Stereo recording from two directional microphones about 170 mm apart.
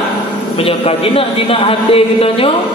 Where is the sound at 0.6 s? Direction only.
35° left (ahead or behind).